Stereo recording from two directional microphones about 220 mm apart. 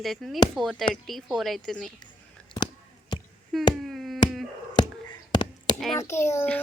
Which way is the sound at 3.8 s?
Centre (ahead or behind).